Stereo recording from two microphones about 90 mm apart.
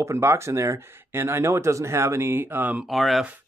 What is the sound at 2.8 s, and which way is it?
Speech, centre (ahead or behind).